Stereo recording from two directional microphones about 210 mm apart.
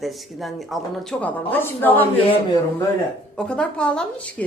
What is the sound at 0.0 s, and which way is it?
A woman's voice, centre (ahead or behind).